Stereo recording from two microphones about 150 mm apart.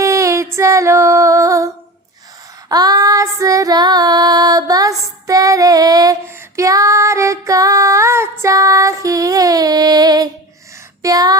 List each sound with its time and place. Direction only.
0.0 s music: 20° right (ahead or behind)
2.6 s female singing: 25° right (ahead or behind)
11.0 s a sound: 25° right (ahead or behind)